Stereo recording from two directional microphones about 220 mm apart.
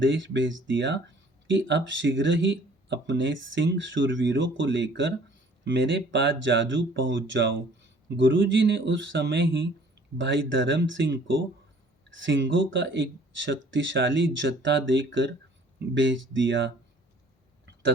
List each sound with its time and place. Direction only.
0.0 s speech: 55° right (ahead or behind)